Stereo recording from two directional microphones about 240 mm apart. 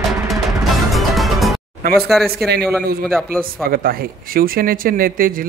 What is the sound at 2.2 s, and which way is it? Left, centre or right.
Speech, right.